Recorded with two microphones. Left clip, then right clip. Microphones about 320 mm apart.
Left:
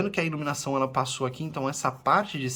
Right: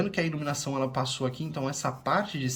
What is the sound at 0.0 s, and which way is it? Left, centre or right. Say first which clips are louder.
Speech: left 2 dB; centre.